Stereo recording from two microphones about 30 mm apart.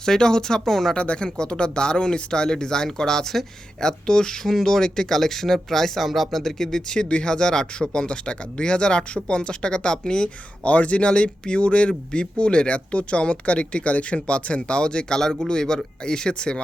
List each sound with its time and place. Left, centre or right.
0.0 s speech: left
0.9 s speech: left; by 6.8 s centre
7.1 s speech: left
10.6 s speech: left
11.1 s speech: left
15.2 s speech: centre